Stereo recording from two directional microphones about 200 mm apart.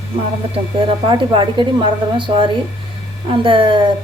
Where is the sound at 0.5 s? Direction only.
25° right (ahead or behind).